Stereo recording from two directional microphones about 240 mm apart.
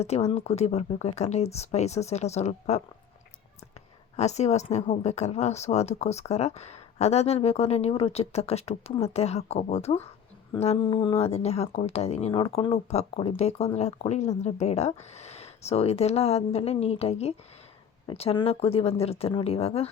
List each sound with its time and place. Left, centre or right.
0.0 s speech: left
4.2 s speech: left